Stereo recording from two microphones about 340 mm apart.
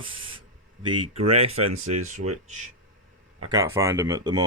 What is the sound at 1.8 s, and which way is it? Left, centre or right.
Speech, right.